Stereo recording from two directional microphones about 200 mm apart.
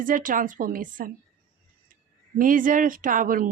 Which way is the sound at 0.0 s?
40° right (ahead or behind).